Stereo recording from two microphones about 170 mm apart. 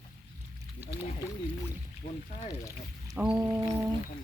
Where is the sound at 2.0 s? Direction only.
35° left (ahead or behind).